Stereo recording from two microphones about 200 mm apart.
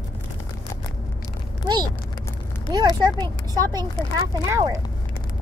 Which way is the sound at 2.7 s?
20° right (ahead or behind).